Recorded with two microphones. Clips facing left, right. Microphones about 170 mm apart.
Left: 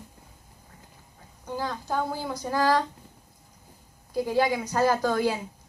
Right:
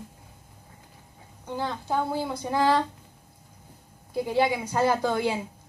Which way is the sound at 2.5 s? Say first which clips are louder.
Right 1 dB; 25° right (ahead or behind).